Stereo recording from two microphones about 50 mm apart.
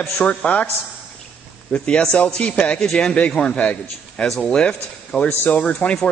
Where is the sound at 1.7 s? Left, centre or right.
Centre.